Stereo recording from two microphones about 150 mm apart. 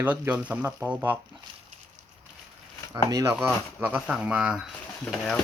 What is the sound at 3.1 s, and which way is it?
Speech, 20° right (ahead or behind).